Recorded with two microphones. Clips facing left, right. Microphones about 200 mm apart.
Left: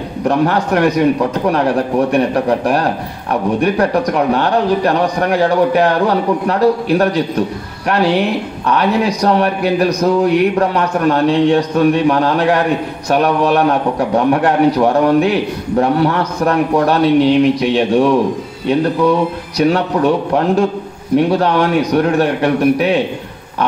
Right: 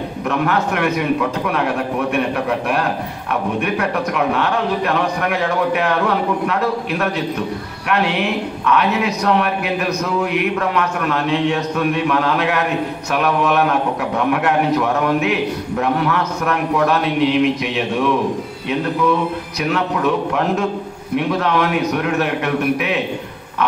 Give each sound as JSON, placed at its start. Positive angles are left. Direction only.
{"t": 0.2, "sound": "a man's voice", "side_deg": 35}
{"t": 19.6, "sound": "a man's voice", "side_deg": 35}